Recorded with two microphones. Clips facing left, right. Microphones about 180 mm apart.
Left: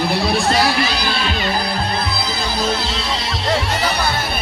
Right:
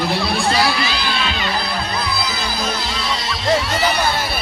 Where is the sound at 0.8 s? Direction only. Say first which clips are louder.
Left 2 dB; 45° left (ahead or behind).